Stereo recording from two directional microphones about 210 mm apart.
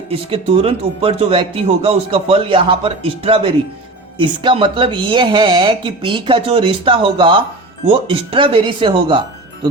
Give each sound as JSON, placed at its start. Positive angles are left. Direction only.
{"t": 0.1, "sound": "speech", "side_deg": -25}